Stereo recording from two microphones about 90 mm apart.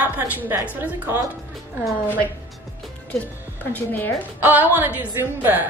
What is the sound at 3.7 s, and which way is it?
Speech, 20° left (ahead or behind).